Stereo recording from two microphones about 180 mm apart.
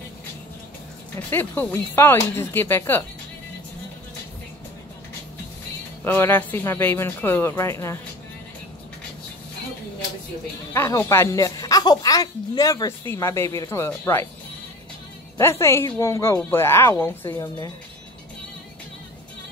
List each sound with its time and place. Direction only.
1.3 s speech: 10° left (ahead or behind)
6.0 s speech: 10° left (ahead or behind)
10.7 s speech: 15° left (ahead or behind)
15.3 s speech: 15° left (ahead or behind)